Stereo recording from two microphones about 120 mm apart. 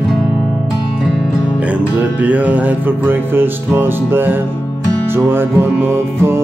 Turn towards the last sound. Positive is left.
turn(degrees=-20)  # may be behind; listen again after turning